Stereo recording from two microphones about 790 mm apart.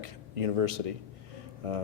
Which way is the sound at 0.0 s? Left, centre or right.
Right.